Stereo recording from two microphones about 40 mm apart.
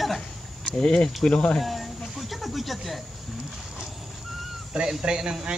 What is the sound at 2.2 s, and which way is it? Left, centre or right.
Snake, centre.